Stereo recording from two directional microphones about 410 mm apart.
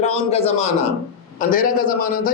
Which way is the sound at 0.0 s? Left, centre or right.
Centre.